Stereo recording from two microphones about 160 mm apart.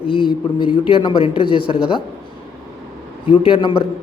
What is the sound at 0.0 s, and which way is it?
Speech, 30° left (ahead or behind).